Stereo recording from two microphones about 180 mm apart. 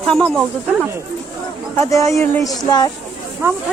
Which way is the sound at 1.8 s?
15° left (ahead or behind).